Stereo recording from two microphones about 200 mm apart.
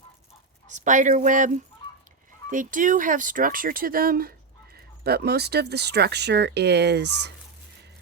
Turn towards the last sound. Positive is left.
turn(degrees=-55)  # may be behind; listen again after turning